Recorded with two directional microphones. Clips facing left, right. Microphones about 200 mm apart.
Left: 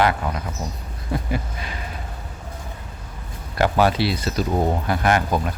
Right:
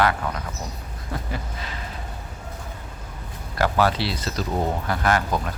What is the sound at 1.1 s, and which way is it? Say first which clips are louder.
Speech: left 6 dB; 15° left (ahead or behind).